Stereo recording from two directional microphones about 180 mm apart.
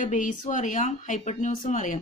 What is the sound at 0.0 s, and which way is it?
Speech, 45° left (ahead or behind).